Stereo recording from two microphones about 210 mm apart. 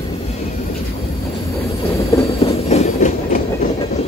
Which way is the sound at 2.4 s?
30° left (ahead or behind).